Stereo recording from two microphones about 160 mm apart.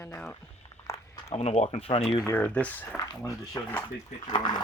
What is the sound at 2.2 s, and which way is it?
Speech, 10° left (ahead or behind).